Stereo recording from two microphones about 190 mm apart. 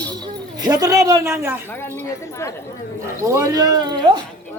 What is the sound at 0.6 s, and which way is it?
Speech, 20° right (ahead or behind).